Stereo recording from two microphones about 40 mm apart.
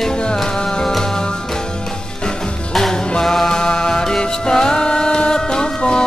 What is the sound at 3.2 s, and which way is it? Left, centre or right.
Music, centre.